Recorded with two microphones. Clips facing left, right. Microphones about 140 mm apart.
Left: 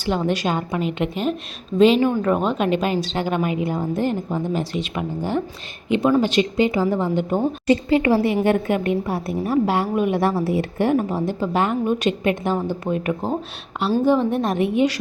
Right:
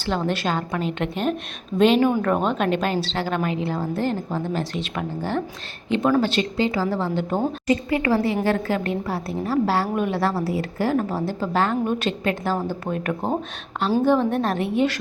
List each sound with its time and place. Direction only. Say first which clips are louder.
0.0 s a woman's voice: left 2 dB; 10° left (ahead or behind)
7.7 s a woman's voice: left 4 dB; 25° left (ahead or behind)